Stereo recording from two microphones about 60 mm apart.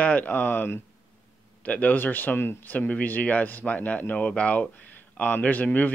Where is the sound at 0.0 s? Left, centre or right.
Left.